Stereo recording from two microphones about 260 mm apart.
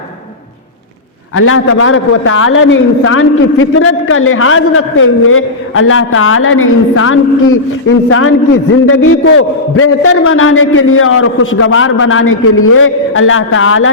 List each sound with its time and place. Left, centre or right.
1.4 s a man's voice: left